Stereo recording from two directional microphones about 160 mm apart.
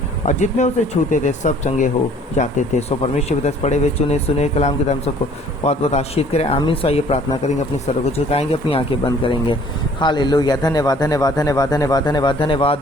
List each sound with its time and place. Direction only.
0.3 s speech: 50° left (ahead or behind)